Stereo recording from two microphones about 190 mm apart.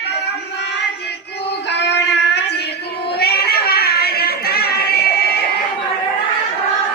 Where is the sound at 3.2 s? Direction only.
55° left (ahead or behind).